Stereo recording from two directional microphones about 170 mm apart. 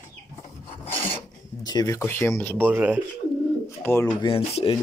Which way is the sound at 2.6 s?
10° right (ahead or behind).